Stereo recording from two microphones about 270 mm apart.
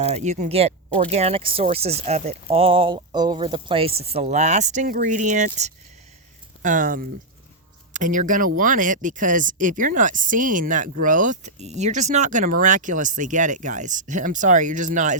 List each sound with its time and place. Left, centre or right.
0.0 s speech: right
6.6 s speech: right